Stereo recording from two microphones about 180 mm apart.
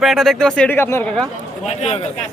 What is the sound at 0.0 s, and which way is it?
Speech, centre (ahead or behind).